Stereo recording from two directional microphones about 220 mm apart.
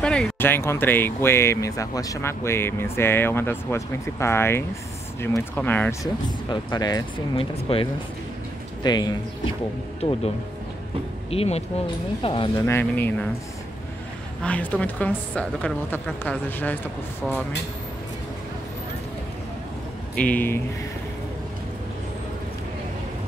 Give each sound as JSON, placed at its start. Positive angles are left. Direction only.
{"t": 0.0, "sound": "speech", "side_deg": 5}
{"t": 6.5, "sound": "speech", "side_deg": 20}
{"t": 12.6, "sound": "speech", "side_deg": 10}
{"t": 14.4, "sound": "speech", "side_deg": 5}
{"t": 20.2, "sound": "speech", "side_deg": 5}